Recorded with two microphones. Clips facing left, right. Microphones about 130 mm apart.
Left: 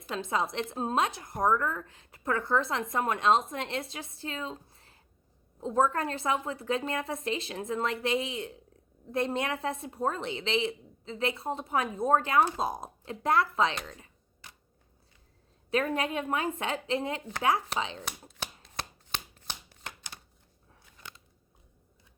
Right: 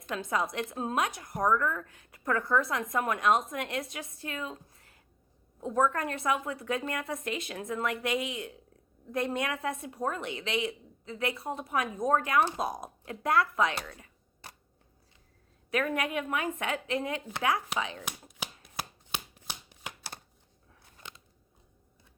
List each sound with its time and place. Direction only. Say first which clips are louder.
0.1 s a woman's voice: left 1 dB; 25° left (ahead or behind)
15.7 s a woman's voice: left 1 dB; 30° left (ahead or behind)
18.3 s chopping: left 1 dB; 15° right (ahead or behind)